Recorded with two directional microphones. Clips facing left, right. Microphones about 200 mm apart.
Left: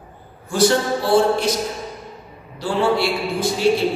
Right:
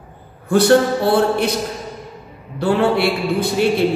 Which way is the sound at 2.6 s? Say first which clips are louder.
Right 3 dB; 60° right (ahead or behind).